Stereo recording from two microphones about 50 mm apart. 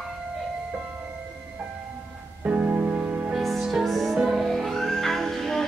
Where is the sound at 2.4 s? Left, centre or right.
Right.